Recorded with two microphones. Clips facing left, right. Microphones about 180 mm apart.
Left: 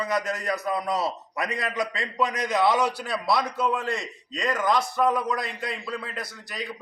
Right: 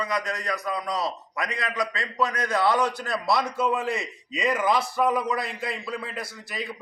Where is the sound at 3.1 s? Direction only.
Centre (ahead or behind).